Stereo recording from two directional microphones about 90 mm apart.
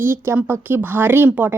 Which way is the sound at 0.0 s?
25° right (ahead or behind).